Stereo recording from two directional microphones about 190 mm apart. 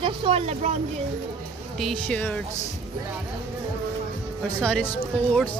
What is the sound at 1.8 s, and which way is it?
Speech, 5° left (ahead or behind).